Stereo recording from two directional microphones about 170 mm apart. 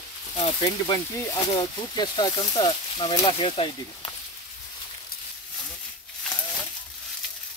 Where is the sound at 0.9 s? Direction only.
25° left (ahead or behind).